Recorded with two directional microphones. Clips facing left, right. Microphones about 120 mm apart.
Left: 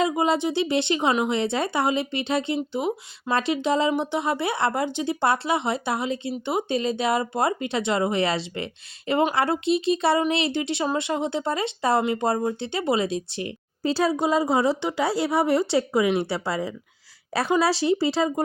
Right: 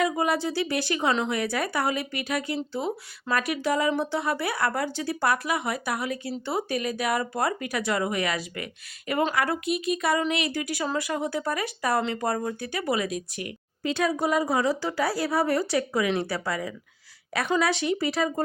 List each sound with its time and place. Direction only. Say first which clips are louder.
0.0 s speech: left 3 dB; 20° left (ahead or behind)